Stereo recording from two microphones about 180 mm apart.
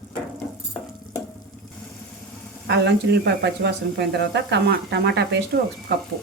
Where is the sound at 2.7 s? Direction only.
70° right (ahead or behind).